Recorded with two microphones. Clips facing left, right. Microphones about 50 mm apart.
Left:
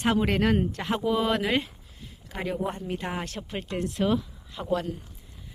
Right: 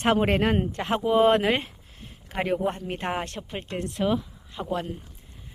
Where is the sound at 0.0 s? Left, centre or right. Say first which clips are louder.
Right 2 dB; right.